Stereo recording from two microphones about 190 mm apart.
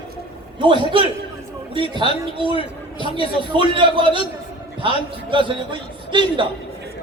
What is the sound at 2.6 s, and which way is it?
Speech, 30° left (ahead or behind).